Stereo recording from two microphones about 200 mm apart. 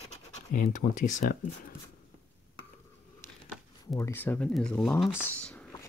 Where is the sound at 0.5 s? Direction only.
40° left (ahead or behind).